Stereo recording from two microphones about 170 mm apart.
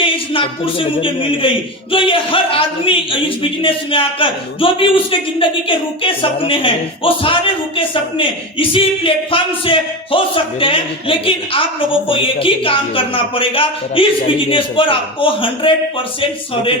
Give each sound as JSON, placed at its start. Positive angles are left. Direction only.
{"t": 0.0, "sound": "speech", "side_deg": 30}